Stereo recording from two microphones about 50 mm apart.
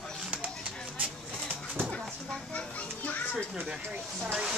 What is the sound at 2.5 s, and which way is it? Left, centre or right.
Children playing, left.